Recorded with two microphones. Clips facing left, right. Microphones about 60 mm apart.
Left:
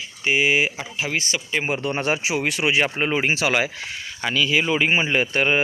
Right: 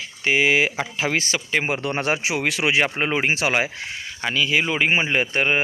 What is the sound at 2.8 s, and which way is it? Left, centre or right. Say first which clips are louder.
Speech: even; right.